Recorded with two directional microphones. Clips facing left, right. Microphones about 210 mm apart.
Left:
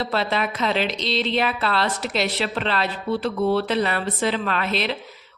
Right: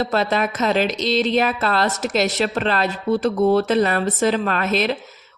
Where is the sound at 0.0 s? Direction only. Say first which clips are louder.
Right 4 dB; 45° right (ahead or behind).